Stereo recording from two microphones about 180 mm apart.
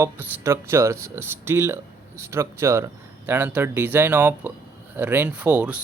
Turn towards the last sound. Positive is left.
turn(degrees=-10)  # may be behind; listen again after turning